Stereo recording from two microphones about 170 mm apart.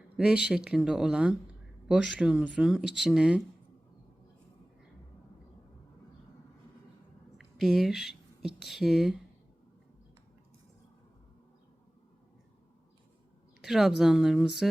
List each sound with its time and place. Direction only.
0.2 s speech: 5° right (ahead or behind)
7.3 s speech: centre (ahead or behind)
13.6 s speech: centre (ahead or behind)